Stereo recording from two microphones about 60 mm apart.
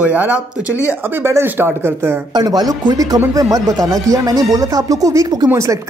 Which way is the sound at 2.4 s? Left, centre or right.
Right.